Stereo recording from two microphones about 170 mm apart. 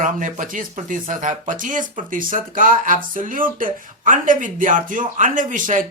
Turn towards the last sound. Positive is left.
turn(degrees=-50)  # may be behind; listen again after turning